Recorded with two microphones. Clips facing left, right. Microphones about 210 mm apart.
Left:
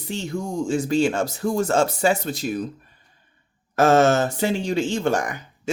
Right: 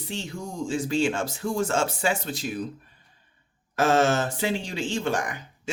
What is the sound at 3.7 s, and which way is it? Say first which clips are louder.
Speech: left 5 dB; 45° left (ahead or behind).